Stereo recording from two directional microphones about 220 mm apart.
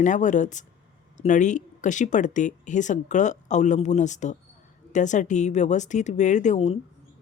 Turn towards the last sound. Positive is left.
turn(degrees=30)  # may be behind; listen again after turning